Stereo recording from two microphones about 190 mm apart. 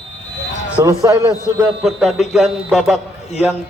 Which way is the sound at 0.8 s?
15° right (ahead or behind).